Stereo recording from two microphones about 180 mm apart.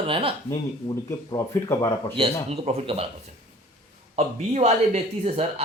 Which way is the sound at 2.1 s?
30° right (ahead or behind).